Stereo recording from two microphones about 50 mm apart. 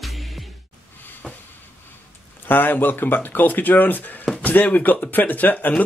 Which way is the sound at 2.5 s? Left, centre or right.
Left.